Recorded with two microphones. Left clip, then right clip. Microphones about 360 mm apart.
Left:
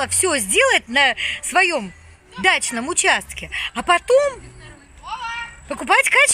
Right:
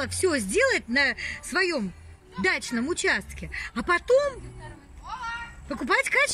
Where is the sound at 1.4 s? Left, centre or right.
Centre.